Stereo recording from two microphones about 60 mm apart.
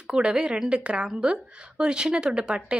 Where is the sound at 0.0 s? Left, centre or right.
Centre.